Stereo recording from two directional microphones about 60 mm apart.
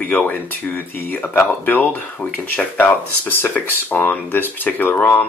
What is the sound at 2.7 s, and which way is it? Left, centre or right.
Speech, left.